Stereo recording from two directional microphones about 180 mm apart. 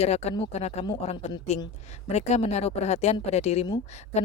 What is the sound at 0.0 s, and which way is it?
Speech, 35° left (ahead or behind).